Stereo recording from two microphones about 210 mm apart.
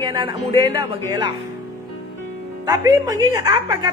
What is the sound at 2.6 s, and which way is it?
Speech, 15° right (ahead or behind).